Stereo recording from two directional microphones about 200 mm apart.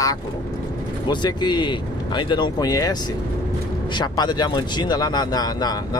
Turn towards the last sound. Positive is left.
turn(degrees=20)  # may be behind; listen again after turning